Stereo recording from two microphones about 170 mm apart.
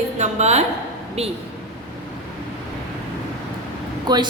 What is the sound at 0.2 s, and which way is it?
Speech, 40° right (ahead or behind).